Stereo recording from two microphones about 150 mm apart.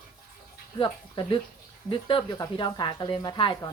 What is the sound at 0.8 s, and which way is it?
A woman's voice, 30° left (ahead or behind).